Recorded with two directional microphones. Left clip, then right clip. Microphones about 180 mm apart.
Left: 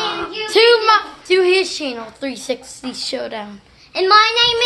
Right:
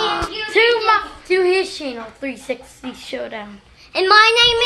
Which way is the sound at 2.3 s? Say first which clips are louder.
Left 3 dB; 30° left (ahead or behind).